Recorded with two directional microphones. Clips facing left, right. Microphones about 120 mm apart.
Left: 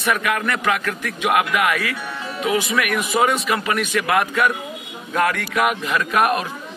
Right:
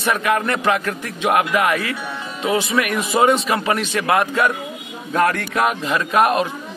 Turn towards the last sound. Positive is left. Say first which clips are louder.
# right 2 dB
turn(degrees=-25)  # may be behind; listen again after turning